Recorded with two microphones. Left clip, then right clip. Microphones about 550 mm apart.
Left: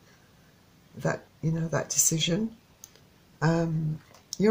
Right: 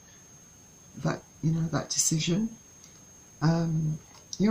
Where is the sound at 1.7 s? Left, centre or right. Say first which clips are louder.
Left 3 dB; centre.